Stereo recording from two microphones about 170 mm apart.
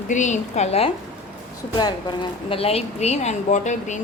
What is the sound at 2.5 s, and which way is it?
Speech, 35° left (ahead or behind).